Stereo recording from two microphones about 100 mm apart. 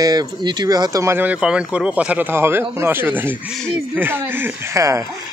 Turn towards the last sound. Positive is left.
turn(degrees=-25)  # may be behind; listen again after turning